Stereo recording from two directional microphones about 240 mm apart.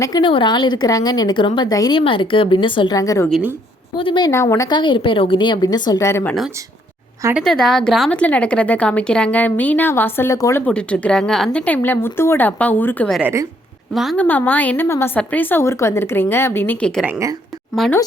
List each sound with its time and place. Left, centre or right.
0.0 s speech: centre
3.2 s a woman's voice: centre
3.9 s a woman's voice: left
7.2 s speech: centre
7.4 s a woman's voice: centre